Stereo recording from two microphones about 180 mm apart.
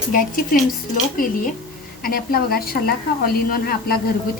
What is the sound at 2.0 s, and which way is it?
A woman's voice, 55° left (ahead or behind).